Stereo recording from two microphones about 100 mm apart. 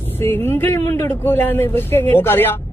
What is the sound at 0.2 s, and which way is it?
A woman's voice, 25° left (ahead or behind).